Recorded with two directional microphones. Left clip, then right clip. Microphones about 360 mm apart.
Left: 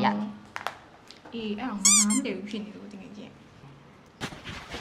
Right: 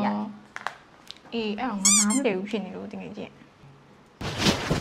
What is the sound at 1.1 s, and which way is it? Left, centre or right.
Speech, right.